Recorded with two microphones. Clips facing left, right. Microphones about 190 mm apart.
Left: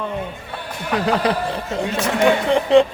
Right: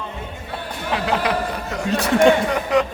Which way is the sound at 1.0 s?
30° left (ahead or behind).